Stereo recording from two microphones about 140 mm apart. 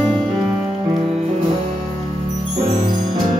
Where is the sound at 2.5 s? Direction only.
50° right (ahead or behind).